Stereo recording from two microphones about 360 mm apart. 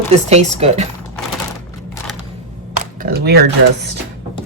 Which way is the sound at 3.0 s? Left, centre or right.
Right.